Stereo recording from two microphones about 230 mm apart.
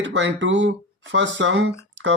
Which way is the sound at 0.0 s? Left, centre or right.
Right.